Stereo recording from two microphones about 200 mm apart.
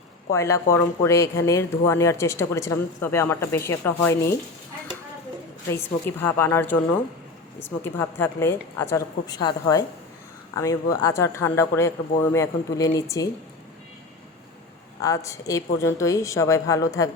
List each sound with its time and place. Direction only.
0.3 s speech: 15° left (ahead or behind)
6.1 s speech: 10° left (ahead or behind)
15.0 s speech: 15° left (ahead or behind)